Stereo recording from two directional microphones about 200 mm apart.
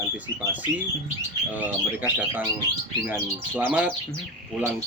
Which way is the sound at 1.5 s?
10° right (ahead or behind).